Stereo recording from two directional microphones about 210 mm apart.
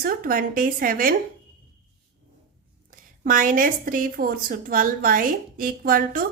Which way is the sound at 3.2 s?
40° right (ahead or behind).